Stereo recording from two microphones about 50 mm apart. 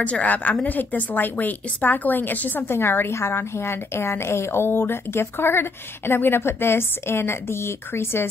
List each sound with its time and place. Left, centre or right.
0.0 s a woman's voice: left
2.7 s a woman's voice: left